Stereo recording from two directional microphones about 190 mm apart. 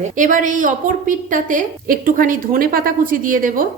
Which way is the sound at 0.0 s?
40° right (ahead or behind).